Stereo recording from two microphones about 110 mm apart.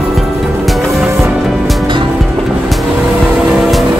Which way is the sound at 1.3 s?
Centre (ahead or behind).